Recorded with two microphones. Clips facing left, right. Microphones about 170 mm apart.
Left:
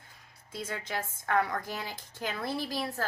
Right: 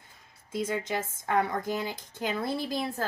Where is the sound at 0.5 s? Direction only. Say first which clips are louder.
Right 6 dB; 20° right (ahead or behind).